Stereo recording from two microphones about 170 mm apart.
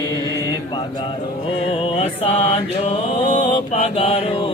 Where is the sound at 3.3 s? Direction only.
30° left (ahead or behind).